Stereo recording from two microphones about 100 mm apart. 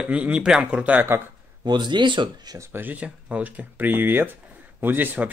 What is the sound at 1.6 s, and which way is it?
Speech, 50° right (ahead or behind).